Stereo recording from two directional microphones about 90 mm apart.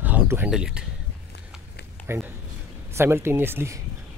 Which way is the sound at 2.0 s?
15° left (ahead or behind).